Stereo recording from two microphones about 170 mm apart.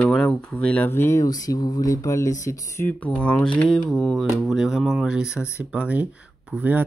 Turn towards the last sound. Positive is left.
turn(degrees=-10)  # may be behind; listen again after turning